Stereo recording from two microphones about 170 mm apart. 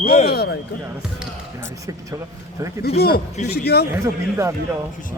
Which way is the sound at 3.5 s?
70° left (ahead or behind).